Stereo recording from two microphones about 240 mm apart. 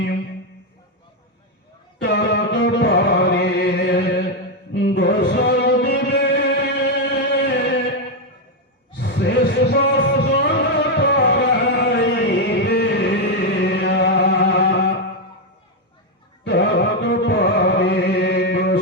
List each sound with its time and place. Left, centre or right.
2.0 s music: left
9.0 s a sound: left
16.4 s music: left